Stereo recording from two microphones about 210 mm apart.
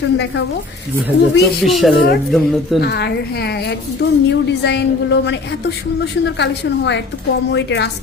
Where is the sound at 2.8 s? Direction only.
50° left (ahead or behind).